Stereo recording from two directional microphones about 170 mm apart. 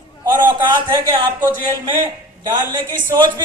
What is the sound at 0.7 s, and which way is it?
Speech, 25° right (ahead or behind).